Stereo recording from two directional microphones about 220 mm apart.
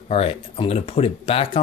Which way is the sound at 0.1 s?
25° left (ahead or behind).